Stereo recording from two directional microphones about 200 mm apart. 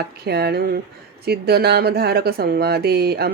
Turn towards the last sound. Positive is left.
turn(degrees=-50)  # may be behind; listen again after turning